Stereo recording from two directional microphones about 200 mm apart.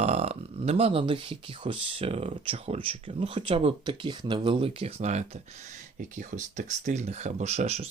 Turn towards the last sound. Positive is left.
turn(degrees=-30)  # may be behind; listen again after turning